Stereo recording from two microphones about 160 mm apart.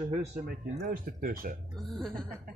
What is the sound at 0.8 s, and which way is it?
Speech, 65° right (ahead or behind).